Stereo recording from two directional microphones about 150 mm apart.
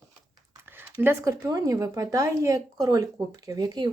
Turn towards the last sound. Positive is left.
turn(degrees=-30)  # may be behind; listen again after turning